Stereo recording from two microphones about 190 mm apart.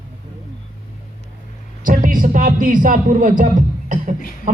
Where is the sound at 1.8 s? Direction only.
45° right (ahead or behind).